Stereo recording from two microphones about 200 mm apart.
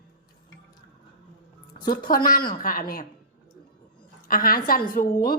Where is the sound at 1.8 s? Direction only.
45° left (ahead or behind).